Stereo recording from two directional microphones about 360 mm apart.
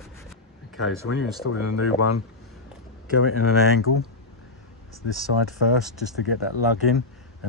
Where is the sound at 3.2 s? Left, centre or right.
Left.